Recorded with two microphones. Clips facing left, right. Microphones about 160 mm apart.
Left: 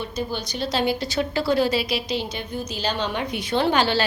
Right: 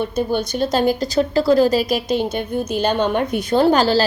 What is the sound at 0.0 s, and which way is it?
A woman's voice, 55° right (ahead or behind).